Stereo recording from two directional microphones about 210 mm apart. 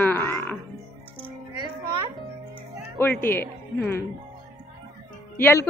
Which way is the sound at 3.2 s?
10° left (ahead or behind).